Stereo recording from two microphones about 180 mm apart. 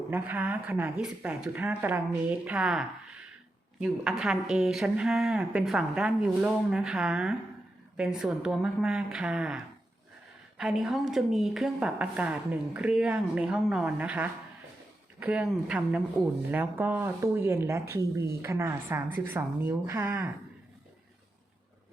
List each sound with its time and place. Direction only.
0.1 s a woman's voice: 10° right (ahead or behind)
10.6 s a woman's voice: 5° right (ahead or behind)